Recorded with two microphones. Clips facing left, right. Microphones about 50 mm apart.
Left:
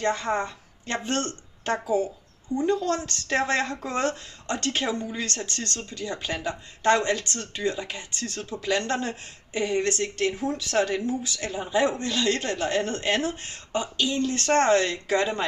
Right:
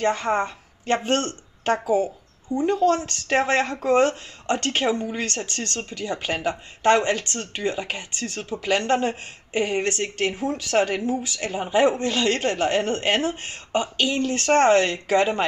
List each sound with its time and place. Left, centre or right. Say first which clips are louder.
0.0 s speech: right 3 dB; right